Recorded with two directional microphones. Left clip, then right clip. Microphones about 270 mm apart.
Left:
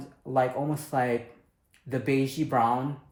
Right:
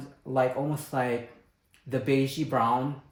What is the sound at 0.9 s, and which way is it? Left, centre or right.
Speech, centre.